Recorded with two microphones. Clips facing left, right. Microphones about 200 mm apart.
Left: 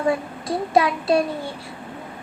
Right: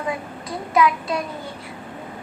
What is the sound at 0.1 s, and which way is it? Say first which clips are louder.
Speech: left 5 dB; 30° left (ahead or behind).